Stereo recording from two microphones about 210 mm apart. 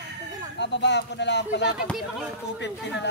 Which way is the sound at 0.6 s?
55° left (ahead or behind).